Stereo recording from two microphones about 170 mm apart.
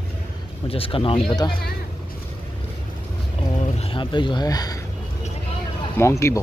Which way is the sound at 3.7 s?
30° left (ahead or behind).